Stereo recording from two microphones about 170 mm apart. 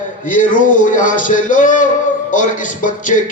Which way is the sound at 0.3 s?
50° left (ahead or behind).